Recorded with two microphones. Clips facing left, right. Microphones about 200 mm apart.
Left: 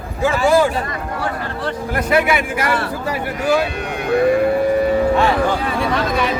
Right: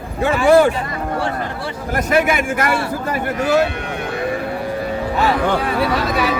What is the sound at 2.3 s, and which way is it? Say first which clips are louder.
Speech: right 1 dB; 45° right (ahead or behind).